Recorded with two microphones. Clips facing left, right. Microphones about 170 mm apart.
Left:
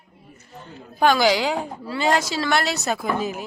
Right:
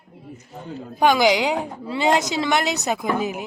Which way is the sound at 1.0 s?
15° right (ahead or behind).